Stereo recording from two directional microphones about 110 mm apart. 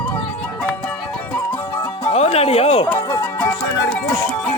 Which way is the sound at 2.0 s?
65° left (ahead or behind).